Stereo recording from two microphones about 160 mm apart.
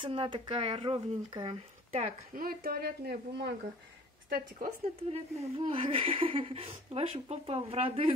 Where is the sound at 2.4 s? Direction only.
65° right (ahead or behind); by 3.5 s 85° right.